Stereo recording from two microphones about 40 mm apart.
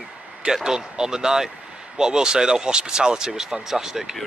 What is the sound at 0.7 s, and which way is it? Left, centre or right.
Speech, centre.